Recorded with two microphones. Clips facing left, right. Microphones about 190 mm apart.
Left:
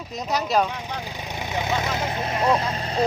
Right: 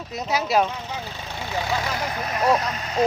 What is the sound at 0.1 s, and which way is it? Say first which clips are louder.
Speech: right 1 dB; 5° right (ahead or behind).